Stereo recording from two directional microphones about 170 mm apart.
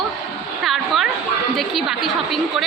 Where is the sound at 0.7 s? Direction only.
Centre (ahead or behind).